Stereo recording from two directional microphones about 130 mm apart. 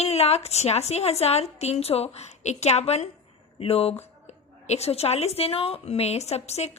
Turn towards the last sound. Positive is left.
turn(degrees=55)  # may be behind; listen again after turning